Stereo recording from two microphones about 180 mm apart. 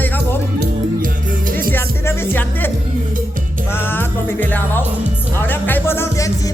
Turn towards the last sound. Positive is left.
turn(degrees=15)  # may be behind; listen again after turning